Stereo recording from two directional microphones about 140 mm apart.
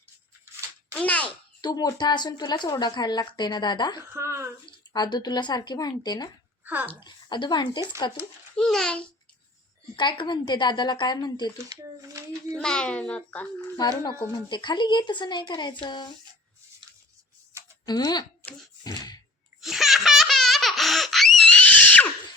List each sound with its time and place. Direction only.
0.9 s a sound: 10° left (ahead or behind)
1.6 s speech: 30° left (ahead or behind)
4.1 s speech: 20° right (ahead or behind)
4.6 s speech: 30° left (ahead or behind)
8.5 s a child's voice: 5° left (ahead or behind)
9.9 s speech: 35° left (ahead or behind)
11.5 s speech: 25° right (ahead or behind)
12.5 s a child's voice: 5° left (ahead or behind)
14.0 s speech: 30° left (ahead or behind)
17.8 s speech: 30° left (ahead or behind)
19.6 s baby laughter: centre (ahead or behind)